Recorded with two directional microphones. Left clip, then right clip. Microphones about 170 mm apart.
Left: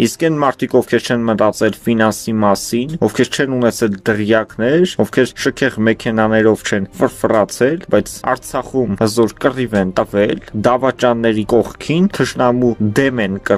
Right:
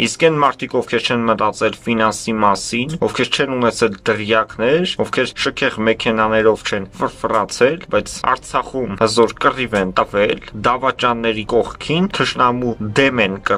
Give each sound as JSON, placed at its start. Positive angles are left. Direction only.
{"t": 0.0, "sound": "speech", "side_deg": 35}